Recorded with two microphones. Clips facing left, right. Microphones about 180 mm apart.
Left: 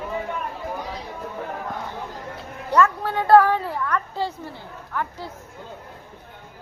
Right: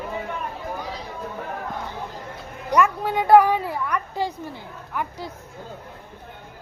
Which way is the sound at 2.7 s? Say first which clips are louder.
Even; 15° right (ahead or behind).